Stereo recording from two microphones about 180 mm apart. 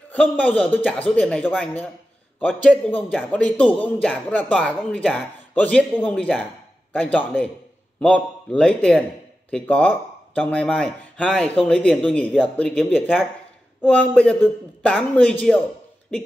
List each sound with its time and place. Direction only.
0.1 s a man's voice: 10° left (ahead or behind)